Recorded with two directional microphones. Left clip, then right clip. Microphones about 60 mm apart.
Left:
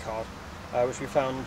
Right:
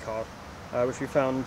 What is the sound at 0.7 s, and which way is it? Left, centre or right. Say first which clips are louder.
Speech: even; right.